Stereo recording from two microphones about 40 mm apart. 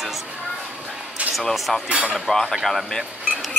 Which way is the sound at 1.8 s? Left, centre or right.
Right.